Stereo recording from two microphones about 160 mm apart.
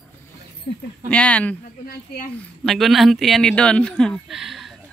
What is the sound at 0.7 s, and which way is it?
Speech, 50° left (ahead or behind).